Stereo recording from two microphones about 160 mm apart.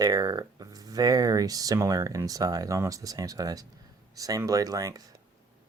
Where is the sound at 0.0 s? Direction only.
20° right (ahead or behind).